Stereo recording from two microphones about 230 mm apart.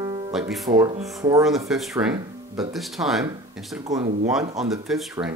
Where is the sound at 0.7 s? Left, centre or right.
Centre.